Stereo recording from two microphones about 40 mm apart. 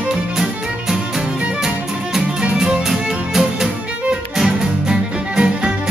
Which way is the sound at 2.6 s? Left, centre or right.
Centre.